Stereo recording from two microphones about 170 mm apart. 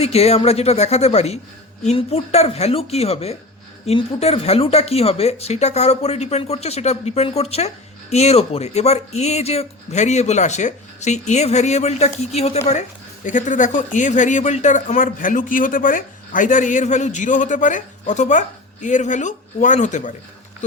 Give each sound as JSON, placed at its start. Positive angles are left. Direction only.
{"t": 0.0, "sound": "speech", "side_deg": 35}